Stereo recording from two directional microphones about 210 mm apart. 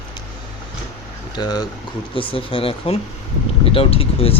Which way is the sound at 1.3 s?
20° left (ahead or behind).